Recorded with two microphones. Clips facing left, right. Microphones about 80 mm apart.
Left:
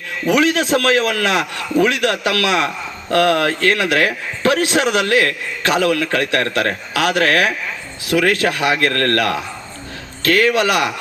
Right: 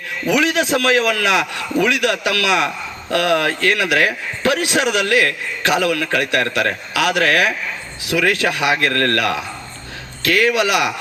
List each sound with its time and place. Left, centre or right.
0.3 s a man's voice: left